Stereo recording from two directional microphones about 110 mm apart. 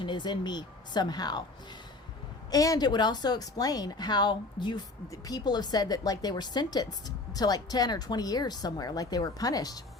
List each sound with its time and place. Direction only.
0.0 s speech: 45° left (ahead or behind)
2.5 s speech: 35° left (ahead or behind)